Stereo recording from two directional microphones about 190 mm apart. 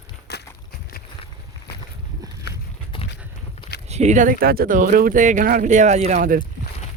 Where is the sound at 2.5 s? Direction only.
60° left (ahead or behind).